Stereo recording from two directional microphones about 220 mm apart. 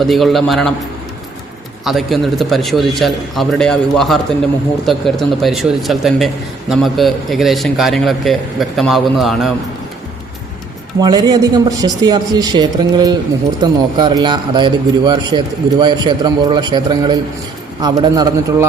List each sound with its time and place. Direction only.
0.0 s a man's voice: centre (ahead or behind)
1.8 s a man's voice: centre (ahead or behind)
11.0 s a man's voice: 20° right (ahead or behind)